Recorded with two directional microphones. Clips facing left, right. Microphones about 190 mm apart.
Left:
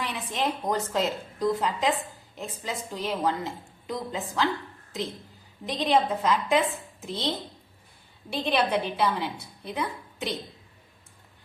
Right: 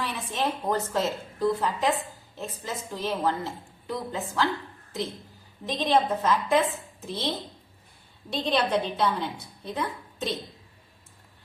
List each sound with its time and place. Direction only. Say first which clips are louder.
0.0 s a woman's voice: even; 15° left (ahead or behind)
5.6 s a woman's voice: even; 15° left (ahead or behind)